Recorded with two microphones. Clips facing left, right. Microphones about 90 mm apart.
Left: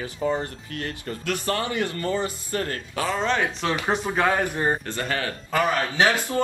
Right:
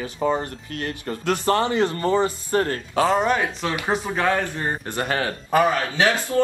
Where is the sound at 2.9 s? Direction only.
70° right (ahead or behind).